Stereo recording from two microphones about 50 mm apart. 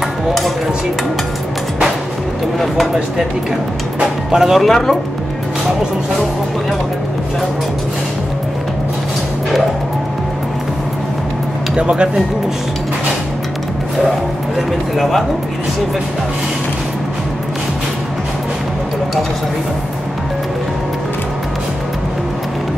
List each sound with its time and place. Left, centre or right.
2.6 s a sound: centre
4.0 s speech: centre
4.6 s speech: centre
11.7 s speech: centre
15.0 s speech: centre